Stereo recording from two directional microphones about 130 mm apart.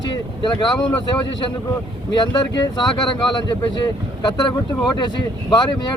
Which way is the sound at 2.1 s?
35° left (ahead or behind).